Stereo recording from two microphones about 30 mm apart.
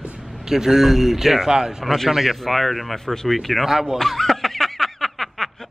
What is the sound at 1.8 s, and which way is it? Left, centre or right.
Speech, centre.